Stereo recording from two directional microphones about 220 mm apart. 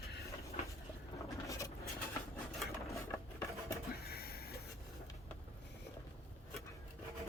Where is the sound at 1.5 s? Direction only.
15° left (ahead or behind).